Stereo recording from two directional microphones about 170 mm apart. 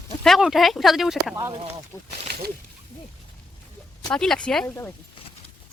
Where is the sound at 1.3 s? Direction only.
15° right (ahead or behind).